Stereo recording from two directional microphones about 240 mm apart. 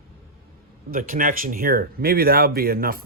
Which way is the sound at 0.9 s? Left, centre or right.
Right.